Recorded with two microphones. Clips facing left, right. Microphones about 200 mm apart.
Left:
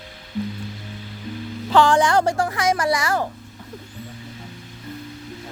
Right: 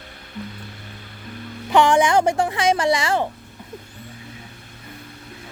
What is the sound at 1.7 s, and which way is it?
A woman's voice, 15° right (ahead or behind).